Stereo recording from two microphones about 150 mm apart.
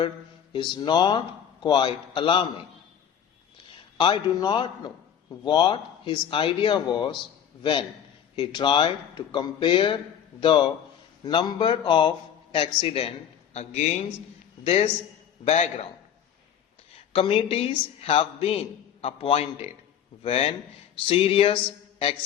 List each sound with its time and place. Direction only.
0.5 s speech: 30° left (ahead or behind)
3.9 s a man's voice: 30° left (ahead or behind); by 15.9 s 45° left (ahead or behind)
17.1 s speech: 35° left (ahead or behind)